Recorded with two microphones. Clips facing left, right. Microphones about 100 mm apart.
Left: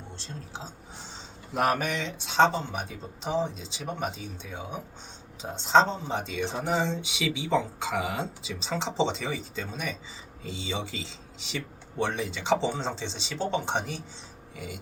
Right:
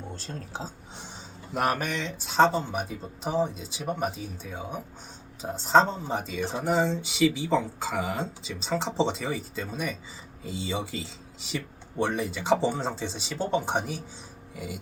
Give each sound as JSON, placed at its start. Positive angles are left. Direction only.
{"t": 0.2, "sound": "speech", "side_deg": -40}
{"t": 1.5, "sound": "speech", "side_deg": 0}